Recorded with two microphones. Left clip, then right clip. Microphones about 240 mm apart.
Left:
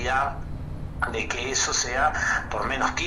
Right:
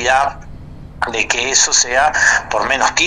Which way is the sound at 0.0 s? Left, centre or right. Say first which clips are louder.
Right 11 dB; right.